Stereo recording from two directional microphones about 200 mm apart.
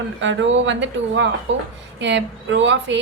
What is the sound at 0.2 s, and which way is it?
A woman's voice, 70° right (ahead or behind).